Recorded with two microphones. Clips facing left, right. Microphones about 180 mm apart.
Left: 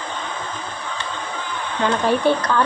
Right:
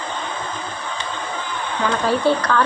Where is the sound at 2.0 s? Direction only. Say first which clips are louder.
Right 1 dB; 20° left (ahead or behind).